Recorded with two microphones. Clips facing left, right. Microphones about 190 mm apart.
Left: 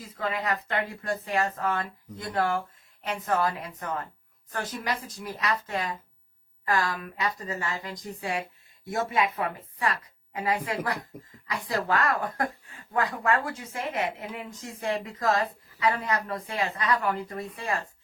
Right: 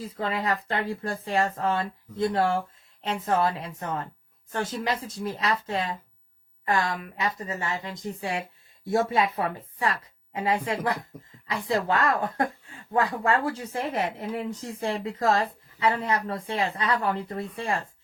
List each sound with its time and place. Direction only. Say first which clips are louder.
0.0 s speech: right 2 dB; 35° right (ahead or behind)